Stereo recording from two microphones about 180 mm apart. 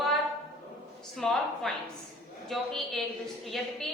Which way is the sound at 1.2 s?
Centre (ahead or behind).